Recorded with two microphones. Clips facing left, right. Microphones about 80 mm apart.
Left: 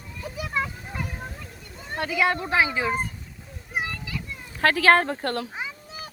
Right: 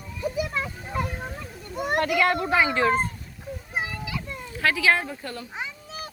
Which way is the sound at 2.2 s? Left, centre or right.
Centre.